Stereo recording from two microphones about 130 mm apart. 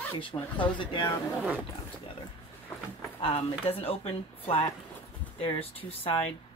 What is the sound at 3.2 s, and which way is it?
Speech, 50° left (ahead or behind).